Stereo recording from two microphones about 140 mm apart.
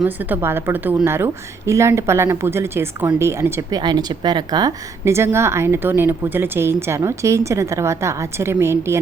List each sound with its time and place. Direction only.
0.0 s a woman's voice: 15° right (ahead or behind)
3.8 s a woman's voice: 30° right (ahead or behind)